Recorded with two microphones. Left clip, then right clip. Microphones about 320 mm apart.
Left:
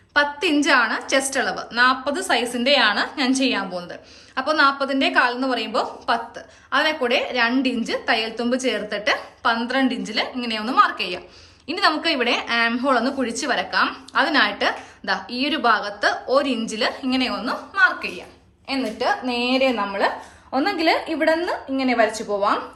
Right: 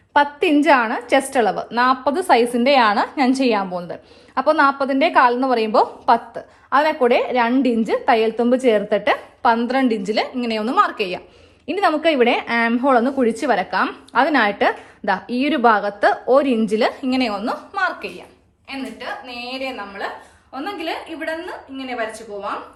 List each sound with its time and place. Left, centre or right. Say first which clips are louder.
0.1 s a woman's voice: right 3 dB; centre
18.7 s a woman's voice: left 7 dB; centre